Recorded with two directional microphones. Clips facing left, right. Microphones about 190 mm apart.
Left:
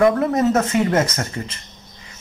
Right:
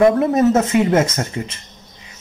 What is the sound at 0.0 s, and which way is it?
Speech, 20° right (ahead or behind).